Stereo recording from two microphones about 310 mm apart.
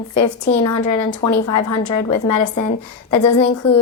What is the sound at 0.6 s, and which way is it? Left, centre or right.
Speech, left.